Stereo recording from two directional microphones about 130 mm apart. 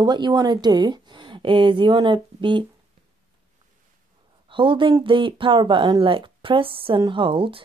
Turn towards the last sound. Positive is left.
turn(degrees=-40)  # may be behind; listen again after turning